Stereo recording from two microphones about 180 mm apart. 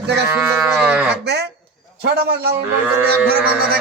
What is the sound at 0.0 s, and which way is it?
Speech, 70° right (ahead or behind).